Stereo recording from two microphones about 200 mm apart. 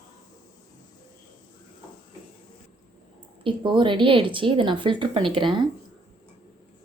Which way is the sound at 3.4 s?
25° right (ahead or behind).